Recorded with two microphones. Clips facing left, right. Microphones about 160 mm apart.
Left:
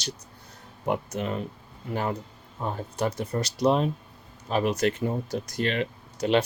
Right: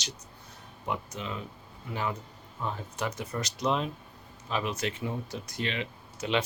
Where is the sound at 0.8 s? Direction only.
50° left (ahead or behind).